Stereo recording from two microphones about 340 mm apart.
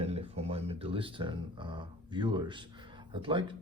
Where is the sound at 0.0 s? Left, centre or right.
Centre.